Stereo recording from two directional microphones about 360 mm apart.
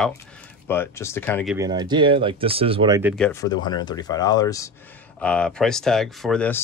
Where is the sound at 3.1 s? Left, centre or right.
Centre.